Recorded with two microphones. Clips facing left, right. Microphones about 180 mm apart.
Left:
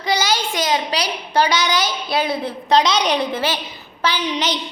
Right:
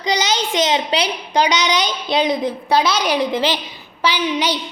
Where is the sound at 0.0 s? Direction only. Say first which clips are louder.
Right 1 dB; 20° right (ahead or behind).